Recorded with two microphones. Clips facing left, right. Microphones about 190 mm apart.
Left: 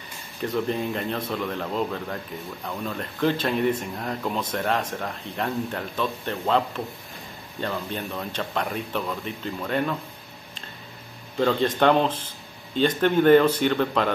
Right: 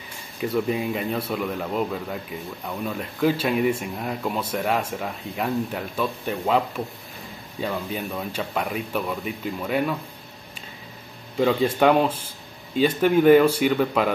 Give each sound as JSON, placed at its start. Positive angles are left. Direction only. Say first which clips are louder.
{"t": 0.4, "sound": "speech", "louder": "right 2 dB", "side_deg": -5}
{"t": 11.3, "sound": "speech", "louder": "right 2 dB", "side_deg": -10}